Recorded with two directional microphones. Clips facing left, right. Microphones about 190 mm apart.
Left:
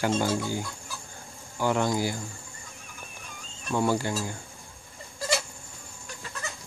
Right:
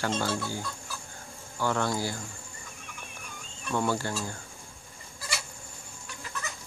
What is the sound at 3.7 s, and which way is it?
Speech, 15° left (ahead or behind).